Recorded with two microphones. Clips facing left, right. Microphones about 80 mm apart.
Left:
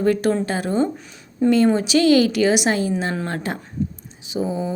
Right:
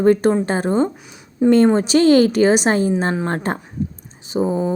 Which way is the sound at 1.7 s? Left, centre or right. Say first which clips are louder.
Right 3 dB; right.